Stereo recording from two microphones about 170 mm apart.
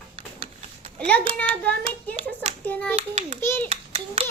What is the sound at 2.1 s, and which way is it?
Hands, 35° right (ahead or behind).